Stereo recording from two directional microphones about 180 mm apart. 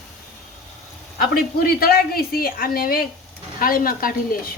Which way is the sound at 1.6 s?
55° left (ahead or behind).